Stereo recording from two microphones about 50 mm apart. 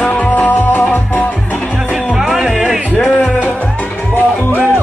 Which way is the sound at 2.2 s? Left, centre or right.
Centre.